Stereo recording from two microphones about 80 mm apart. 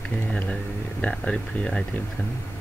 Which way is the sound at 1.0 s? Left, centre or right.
Centre.